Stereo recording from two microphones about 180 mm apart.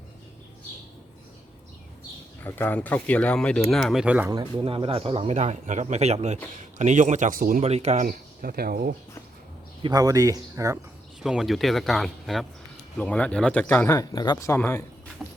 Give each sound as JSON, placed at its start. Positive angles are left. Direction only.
{"t": 2.4, "sound": "speech", "side_deg": 10}
{"t": 4.3, "sound": "speech", "side_deg": -25}
{"t": 7.6, "sound": "speech", "side_deg": -35}
{"t": 8.0, "sound": "speech", "side_deg": -50}
{"t": 9.8, "sound": "speech", "side_deg": -20}
{"t": 11.2, "sound": "speech", "side_deg": -5}
{"t": 13.9, "sound": "speech", "side_deg": 20}